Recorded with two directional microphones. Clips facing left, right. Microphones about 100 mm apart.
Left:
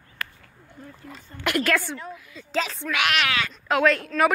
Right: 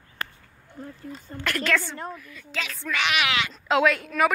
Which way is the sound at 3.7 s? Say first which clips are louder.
Left 1 dB; 10° right (ahead or behind).